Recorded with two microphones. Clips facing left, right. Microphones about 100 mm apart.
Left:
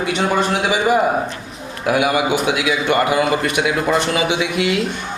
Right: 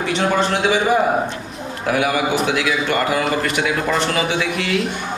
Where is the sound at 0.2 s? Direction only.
10° left (ahead or behind).